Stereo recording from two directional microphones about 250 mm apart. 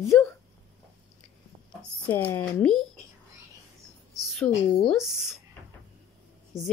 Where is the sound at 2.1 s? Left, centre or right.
Centre.